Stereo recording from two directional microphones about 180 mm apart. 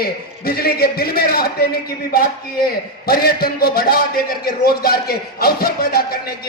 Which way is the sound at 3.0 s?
55° left (ahead or behind).